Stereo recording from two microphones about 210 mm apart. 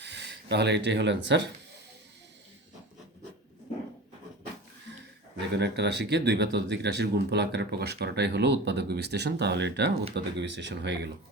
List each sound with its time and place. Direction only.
0.0 s a sound: 55° right (ahead or behind)
0.5 s speech: 55° right (ahead or behind)
5.5 s speech: 55° right (ahead or behind)